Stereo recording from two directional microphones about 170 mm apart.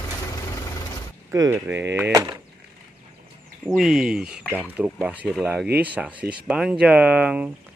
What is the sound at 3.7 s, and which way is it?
Speech, 5° right (ahead or behind).